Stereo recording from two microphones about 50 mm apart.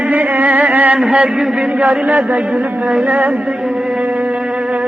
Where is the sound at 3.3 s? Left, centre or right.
Centre.